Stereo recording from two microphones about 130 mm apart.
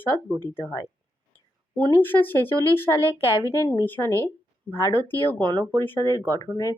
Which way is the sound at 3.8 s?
15° left (ahead or behind).